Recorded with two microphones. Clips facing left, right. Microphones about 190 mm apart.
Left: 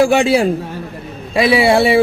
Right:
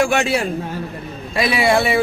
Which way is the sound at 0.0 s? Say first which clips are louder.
Left 6 dB; 30° left (ahead or behind).